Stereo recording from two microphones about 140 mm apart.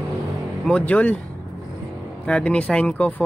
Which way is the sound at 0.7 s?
10° left (ahead or behind).